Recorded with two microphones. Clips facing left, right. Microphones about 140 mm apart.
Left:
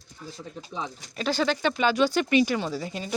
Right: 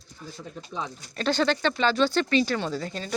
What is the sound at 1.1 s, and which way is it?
Speech, 5° left (ahead or behind).